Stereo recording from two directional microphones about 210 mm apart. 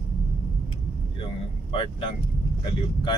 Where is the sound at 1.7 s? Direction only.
25° left (ahead or behind).